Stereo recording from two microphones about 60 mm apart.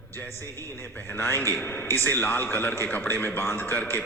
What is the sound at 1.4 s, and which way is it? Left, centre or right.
A man's voice, left.